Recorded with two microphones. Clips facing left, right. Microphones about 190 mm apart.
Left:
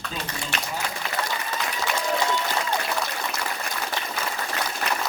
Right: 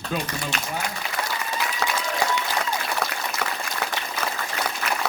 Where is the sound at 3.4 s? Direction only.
60° right (ahead or behind).